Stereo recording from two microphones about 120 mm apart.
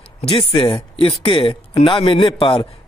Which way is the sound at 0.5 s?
50° left (ahead or behind).